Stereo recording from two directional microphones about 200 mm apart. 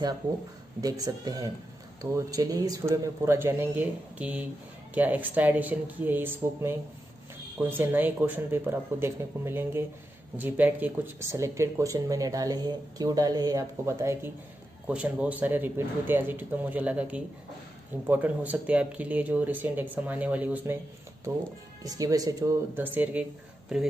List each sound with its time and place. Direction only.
0.7 s speech: 20° right (ahead or behind)
23.2 s speech: 5° right (ahead or behind)